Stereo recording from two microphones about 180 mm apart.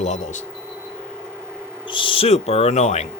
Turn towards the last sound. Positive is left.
turn(degrees=40)  # may be behind; listen again after turning